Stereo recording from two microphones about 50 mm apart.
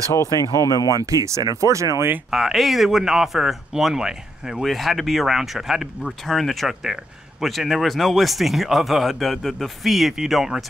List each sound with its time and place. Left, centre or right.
0.1 s speech: left
1.2 s speech: right
2.3 s speech: centre
4.6 s speech: centre